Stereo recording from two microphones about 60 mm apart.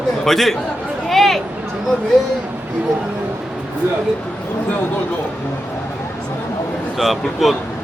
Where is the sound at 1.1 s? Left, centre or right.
Centre.